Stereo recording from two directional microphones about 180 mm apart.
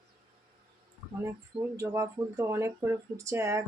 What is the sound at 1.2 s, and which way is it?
Speech, 15° right (ahead or behind).